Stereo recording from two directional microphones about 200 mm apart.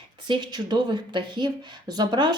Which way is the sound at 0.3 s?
20° right (ahead or behind).